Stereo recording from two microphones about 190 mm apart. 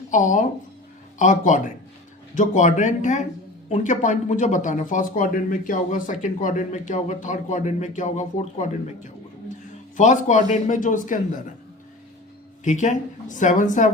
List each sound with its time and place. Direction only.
0.1 s speech: 40° left (ahead or behind)
10.0 s speech: 40° left (ahead or behind)
12.6 s speech: 40° left (ahead or behind)